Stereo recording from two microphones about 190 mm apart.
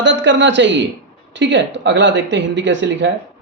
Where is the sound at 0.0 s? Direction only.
75° right (ahead or behind).